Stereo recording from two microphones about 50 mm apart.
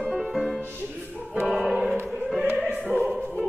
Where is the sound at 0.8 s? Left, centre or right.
Right.